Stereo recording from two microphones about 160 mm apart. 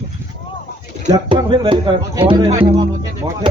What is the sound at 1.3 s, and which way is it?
Music, 30° right (ahead or behind).